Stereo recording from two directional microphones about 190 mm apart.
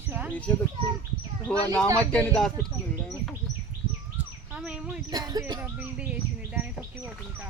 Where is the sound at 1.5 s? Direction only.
5° left (ahead or behind).